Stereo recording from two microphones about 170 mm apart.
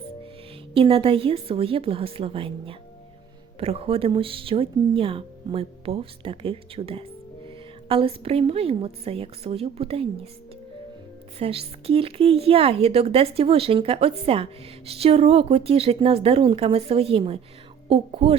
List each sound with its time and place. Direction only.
0.7 s a woman's voice: 35° right (ahead or behind)
11.3 s a woman's voice: 35° right (ahead or behind)